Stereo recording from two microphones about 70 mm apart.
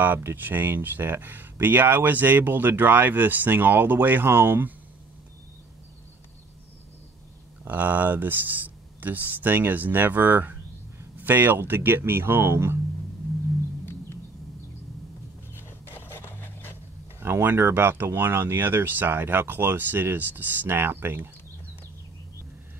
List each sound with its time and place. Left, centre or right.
0.0 s speech: right
7.6 s speech: right
15.5 s a sound: left
17.2 s speech: right